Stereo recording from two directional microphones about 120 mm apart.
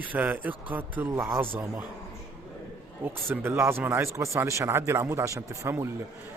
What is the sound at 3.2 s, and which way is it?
Speech, 20° right (ahead or behind).